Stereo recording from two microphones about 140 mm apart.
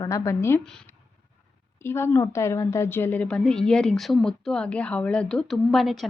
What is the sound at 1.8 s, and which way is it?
Speech, 15° left (ahead or behind).